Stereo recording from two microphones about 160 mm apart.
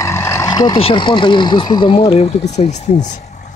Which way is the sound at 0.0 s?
15° left (ahead or behind).